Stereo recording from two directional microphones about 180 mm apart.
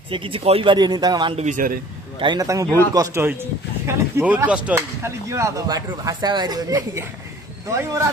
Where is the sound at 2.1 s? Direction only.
25° right (ahead or behind).